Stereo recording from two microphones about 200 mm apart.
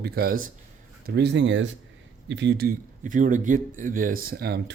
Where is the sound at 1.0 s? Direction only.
55° right (ahead or behind).